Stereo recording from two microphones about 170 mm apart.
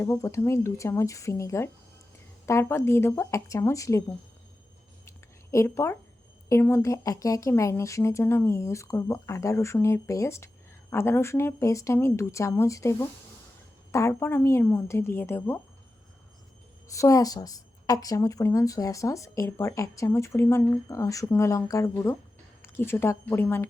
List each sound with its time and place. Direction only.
0.0 s a woman's voice: 20° left (ahead or behind)
5.0 s a sound: 15° left (ahead or behind)
6.5 s a woman's voice: 15° left (ahead or behind)
16.9 s a woman's voice: 20° left (ahead or behind)